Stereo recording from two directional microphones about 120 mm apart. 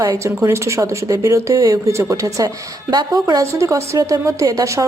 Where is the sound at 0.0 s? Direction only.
25° right (ahead or behind).